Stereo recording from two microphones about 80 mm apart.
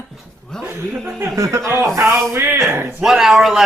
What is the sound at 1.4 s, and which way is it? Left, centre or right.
Speech, right.